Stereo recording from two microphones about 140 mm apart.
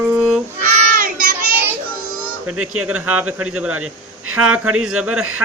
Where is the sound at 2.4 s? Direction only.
5° right (ahead or behind).